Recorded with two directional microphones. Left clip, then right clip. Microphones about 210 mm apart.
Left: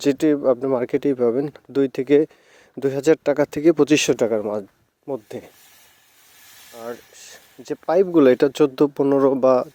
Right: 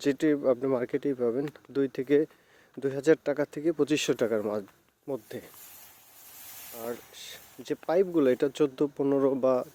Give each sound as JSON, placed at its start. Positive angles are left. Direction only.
{"t": 0.0, "sound": "speech", "side_deg": 35}
{"t": 4.4, "sound": "stir", "side_deg": 20}
{"t": 5.0, "sound": "stir", "side_deg": 30}
{"t": 6.7, "sound": "a sound", "side_deg": 20}
{"t": 7.9, "sound": "speech", "side_deg": 35}